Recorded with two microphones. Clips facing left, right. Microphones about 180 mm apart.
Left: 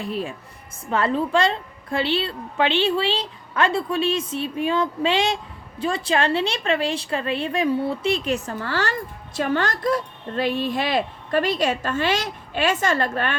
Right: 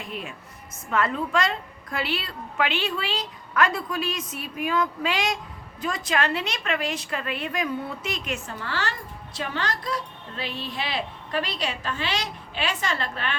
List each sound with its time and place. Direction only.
0.0 s a woman's voice: 35° left (ahead or behind)